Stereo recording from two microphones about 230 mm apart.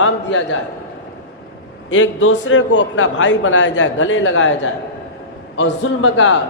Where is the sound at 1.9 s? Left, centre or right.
Left.